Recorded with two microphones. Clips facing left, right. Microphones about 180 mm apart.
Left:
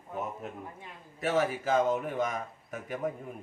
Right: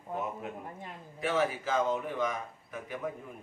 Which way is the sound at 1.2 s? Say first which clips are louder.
Left 2 dB; 45° left (ahead or behind).